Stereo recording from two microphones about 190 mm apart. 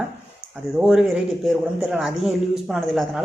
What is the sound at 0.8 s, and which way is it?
Speech, 5° right (ahead or behind).